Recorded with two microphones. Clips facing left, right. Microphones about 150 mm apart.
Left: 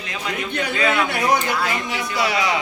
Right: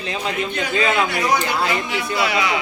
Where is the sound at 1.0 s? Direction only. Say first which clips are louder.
Even; 50° left (ahead or behind).